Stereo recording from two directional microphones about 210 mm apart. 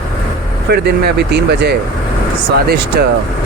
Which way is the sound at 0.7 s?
50° right (ahead or behind).